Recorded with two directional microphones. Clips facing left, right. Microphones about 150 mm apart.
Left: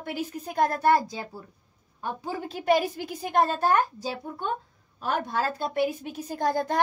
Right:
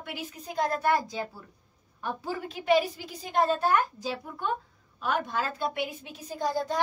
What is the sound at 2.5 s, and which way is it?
A woman's voice, 45° left (ahead or behind).